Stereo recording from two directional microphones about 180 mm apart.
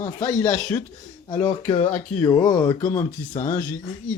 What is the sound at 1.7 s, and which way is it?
Speech, 30° left (ahead or behind).